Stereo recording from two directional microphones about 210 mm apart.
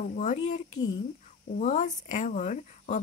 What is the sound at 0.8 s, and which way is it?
Speech, 20° left (ahead or behind).